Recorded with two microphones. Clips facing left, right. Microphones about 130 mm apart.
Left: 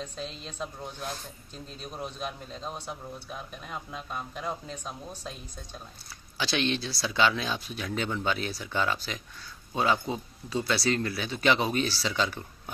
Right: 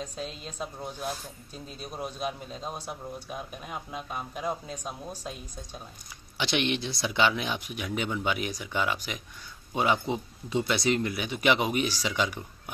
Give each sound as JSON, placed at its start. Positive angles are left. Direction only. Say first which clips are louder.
{"t": 0.0, "sound": "a woman's voice", "louder": "right 1 dB", "side_deg": -10}